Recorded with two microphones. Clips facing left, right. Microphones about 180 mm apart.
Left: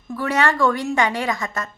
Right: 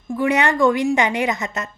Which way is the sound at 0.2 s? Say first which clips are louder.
Right 2 dB; 20° right (ahead or behind).